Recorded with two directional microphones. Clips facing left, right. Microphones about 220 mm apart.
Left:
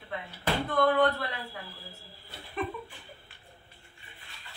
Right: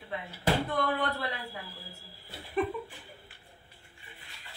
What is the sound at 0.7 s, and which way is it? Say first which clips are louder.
Speech: left 6 dB; 10° right (ahead or behind).